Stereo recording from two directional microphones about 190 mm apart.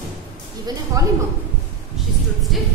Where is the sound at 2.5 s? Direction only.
Centre (ahead or behind).